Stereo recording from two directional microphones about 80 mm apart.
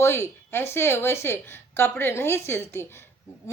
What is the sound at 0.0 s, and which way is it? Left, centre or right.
A woman's voice, left.